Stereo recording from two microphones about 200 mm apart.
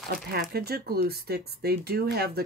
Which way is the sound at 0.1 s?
50° right (ahead or behind).